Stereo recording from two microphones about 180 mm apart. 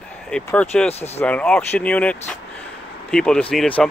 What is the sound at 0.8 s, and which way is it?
Speech, 35° left (ahead or behind).